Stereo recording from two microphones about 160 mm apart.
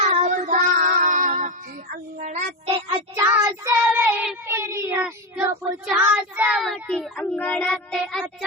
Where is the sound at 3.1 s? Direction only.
20° right (ahead or behind).